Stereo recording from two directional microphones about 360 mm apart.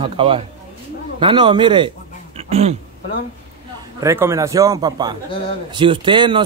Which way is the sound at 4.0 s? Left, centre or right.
Centre.